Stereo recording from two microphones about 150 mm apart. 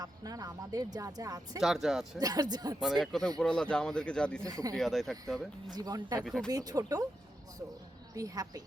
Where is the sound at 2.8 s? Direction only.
Centre (ahead or behind).